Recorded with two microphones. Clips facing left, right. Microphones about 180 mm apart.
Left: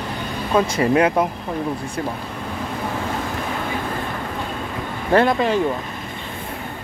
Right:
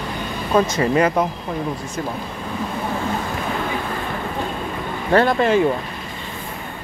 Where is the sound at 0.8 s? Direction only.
5° left (ahead or behind).